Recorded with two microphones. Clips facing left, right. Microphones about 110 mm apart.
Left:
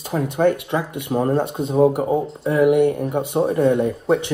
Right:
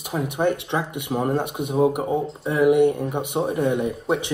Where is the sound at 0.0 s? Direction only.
15° right (ahead or behind).